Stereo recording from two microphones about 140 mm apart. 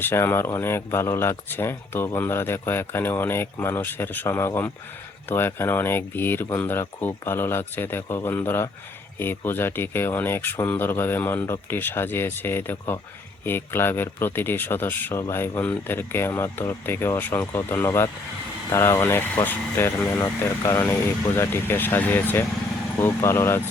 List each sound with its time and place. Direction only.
0.0 s speech: 15° left (ahead or behind)